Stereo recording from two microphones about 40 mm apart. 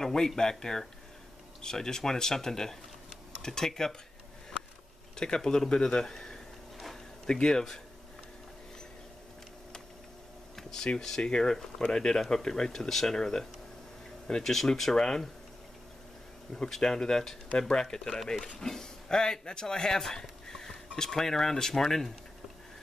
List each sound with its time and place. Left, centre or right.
0.0 s speech: centre
5.1 s speech: centre
10.5 s a sound: centre
11.0 s speech: centre
16.7 s speech: centre